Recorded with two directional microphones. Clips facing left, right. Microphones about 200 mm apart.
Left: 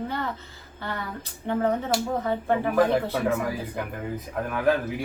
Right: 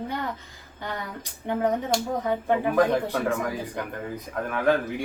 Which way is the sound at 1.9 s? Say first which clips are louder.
Even; 5° left (ahead or behind).